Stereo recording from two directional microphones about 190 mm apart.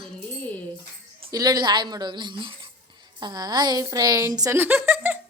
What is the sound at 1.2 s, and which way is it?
A woman's voice, 20° right (ahead or behind).